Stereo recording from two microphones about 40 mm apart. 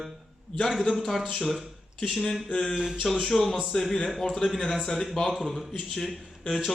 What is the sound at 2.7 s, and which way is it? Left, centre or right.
Speech, centre.